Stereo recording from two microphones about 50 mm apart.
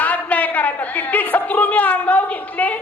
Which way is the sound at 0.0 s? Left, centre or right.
Left.